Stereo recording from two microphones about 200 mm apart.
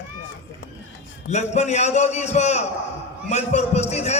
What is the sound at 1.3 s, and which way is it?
A man's voice, 35° left (ahead or behind).